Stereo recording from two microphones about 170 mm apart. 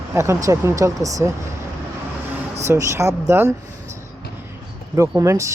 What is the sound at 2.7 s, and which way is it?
Speech, 15° right (ahead or behind).